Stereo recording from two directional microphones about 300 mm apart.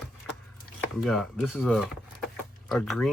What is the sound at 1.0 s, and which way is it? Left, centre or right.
Speech, centre.